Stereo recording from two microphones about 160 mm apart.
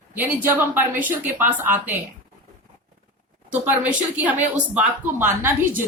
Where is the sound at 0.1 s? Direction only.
10° right (ahead or behind).